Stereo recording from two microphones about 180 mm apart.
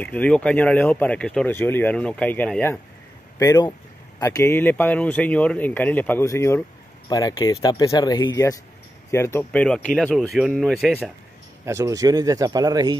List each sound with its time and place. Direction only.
0.0 s speech: 5° left (ahead or behind)
3.3 s speech: 20° left (ahead or behind); by 11.0 s centre (ahead or behind)
11.6 s speech: 15° right (ahead or behind)